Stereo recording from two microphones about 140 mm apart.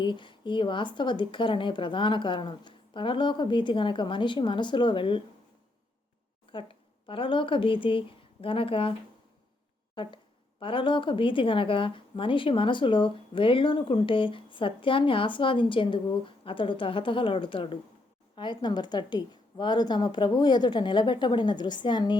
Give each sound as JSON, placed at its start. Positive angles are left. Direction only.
{"t": 0.0, "sound": "a woman's voice", "side_deg": 35}
{"t": 6.5, "sound": "a woman's voice", "side_deg": 40}